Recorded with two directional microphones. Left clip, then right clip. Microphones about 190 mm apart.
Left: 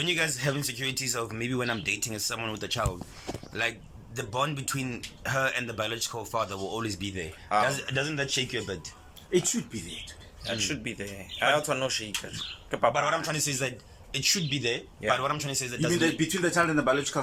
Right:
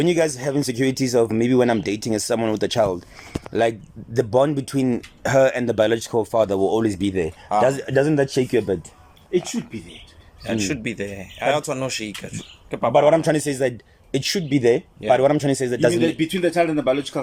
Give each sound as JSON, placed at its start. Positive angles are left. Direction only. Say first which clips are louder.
{"t": 0.0, "sound": "speech", "louder": "right 8 dB", "side_deg": -45}
{"t": 9.3, "sound": "speech", "louder": "right 4 dB", "side_deg": -10}
{"t": 10.4, "sound": "speech", "louder": "right 7 dB", "side_deg": -20}
{"t": 12.9, "sound": "speech", "louder": "right 12 dB", "side_deg": -40}
{"t": 16.0, "sound": "speech", "louder": "right 6 dB", "side_deg": -15}